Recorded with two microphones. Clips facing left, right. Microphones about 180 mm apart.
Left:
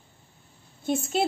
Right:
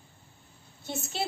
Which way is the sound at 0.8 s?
50° left (ahead or behind).